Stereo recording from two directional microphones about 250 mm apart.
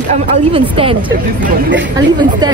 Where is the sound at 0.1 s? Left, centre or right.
Right.